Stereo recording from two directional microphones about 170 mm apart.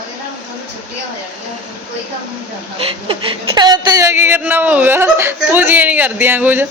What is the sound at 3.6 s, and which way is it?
Speech, 20° right (ahead or behind).